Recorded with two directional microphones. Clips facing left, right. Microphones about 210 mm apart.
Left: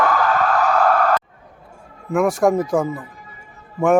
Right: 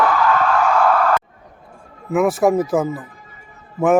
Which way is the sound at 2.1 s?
5° right (ahead or behind).